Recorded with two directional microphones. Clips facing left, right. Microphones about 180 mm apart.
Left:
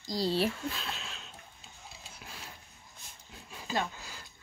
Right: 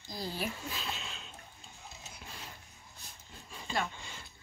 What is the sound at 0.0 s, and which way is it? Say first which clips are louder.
Speech: left 9 dB; 90° left.